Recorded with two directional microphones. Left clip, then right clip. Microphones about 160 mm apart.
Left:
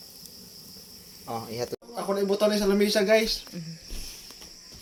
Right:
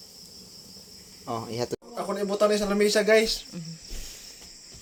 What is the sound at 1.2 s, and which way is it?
Speech, 60° right (ahead or behind).